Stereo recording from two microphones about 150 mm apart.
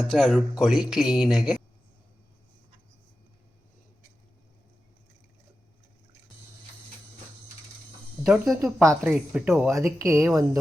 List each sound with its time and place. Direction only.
0.1 s speech: centre (ahead or behind)
8.2 s speech: 5° right (ahead or behind)
8.5 s speech: 20° right (ahead or behind)
9.0 s speech: 10° right (ahead or behind)